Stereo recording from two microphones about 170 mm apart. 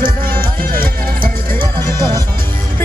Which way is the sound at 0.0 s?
60° right (ahead or behind).